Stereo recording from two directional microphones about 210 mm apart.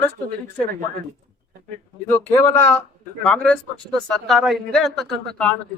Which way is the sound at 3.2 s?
5° left (ahead or behind).